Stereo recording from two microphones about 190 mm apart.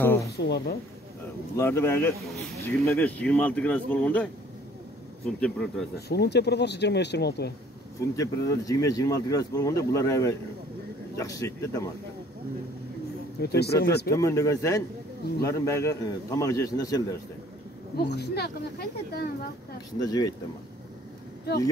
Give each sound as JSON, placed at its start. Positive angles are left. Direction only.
{"t": 0.0, "sound": "a woman's voice", "side_deg": 10}
{"t": 0.4, "sound": "speech", "side_deg": 60}
{"t": 1.6, "sound": "speech", "side_deg": 15}
{"t": 5.9, "sound": "speech", "side_deg": 60}
{"t": 8.2, "sound": "speech", "side_deg": 15}
{"t": 13.4, "sound": "speech", "side_deg": 60}
{"t": 14.1, "sound": "speech", "side_deg": 15}
{"t": 17.9, "sound": "speech", "side_deg": 60}
{"t": 20.1, "sound": "speech", "side_deg": 20}